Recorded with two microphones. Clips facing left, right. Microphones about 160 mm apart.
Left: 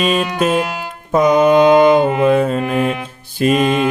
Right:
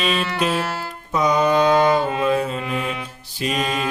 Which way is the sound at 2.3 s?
50° left (ahead or behind).